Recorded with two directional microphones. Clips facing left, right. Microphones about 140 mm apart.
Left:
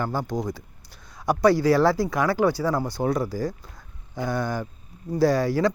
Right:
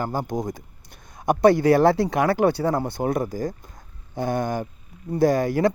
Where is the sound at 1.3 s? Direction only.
55° right (ahead or behind).